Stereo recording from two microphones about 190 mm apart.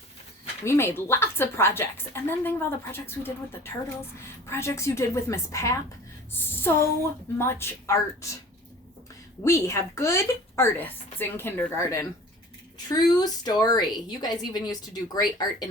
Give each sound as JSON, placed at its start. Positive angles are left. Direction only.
{"t": 0.6, "sound": "a woman's voice", "side_deg": 15}
{"t": 9.4, "sound": "a woman's voice", "side_deg": 15}